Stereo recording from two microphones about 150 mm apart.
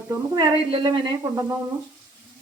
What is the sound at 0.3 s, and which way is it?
A woman's voice, 30° right (ahead or behind).